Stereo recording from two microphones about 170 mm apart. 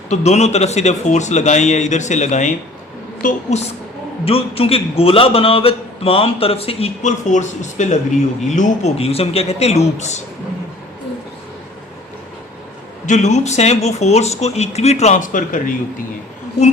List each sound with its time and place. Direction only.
0.1 s a man's voice: 40° left (ahead or behind)
4.3 s a man's voice: 35° left (ahead or behind)
13.1 s a man's voice: 45° left (ahead or behind)